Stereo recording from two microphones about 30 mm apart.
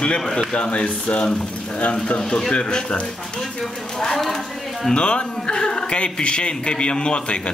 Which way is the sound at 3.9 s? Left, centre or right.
Centre.